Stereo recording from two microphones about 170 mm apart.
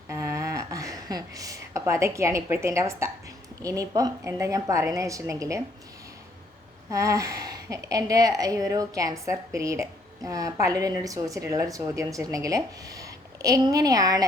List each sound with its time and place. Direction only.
0.1 s a sound: 15° right (ahead or behind)
3.6 s a woman's voice: 20° right (ahead or behind)
6.9 s a woman's voice: 20° right (ahead or behind)